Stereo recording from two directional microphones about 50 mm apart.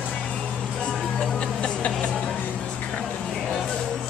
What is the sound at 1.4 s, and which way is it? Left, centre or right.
Music, centre.